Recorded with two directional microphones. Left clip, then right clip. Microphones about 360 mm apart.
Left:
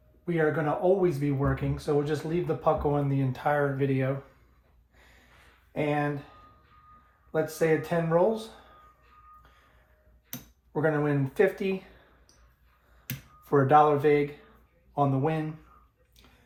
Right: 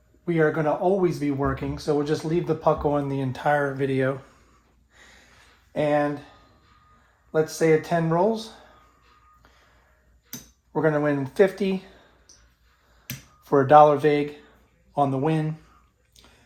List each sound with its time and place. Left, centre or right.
0.3 s speech: right
5.7 s speech: right
7.3 s speech: right
10.7 s speech: right
13.4 s speech: right